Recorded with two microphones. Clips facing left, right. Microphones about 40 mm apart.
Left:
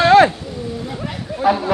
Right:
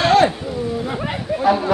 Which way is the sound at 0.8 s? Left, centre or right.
Right.